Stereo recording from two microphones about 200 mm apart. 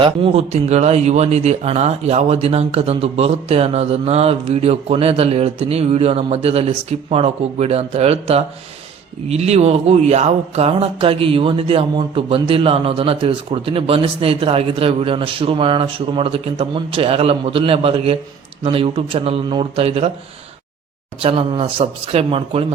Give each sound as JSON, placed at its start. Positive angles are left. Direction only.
{"t": 0.0, "sound": "speech", "side_deg": -25}
{"t": 21.2, "sound": "speech", "side_deg": -25}